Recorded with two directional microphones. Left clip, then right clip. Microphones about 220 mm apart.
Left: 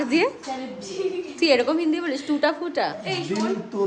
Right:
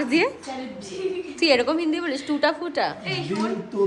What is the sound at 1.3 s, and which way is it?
A woman's voice, 5° right (ahead or behind).